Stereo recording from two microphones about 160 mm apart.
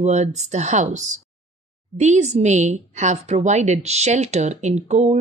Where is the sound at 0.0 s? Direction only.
45° right (ahead or behind).